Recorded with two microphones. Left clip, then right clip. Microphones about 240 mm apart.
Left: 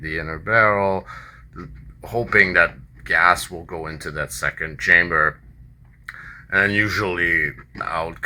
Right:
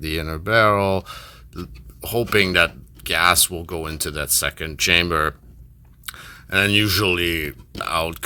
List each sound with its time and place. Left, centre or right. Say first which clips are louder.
0.0 s speech: even; right
2.0 s speech: left 2 dB; right
6.2 s speech: left 1 dB; right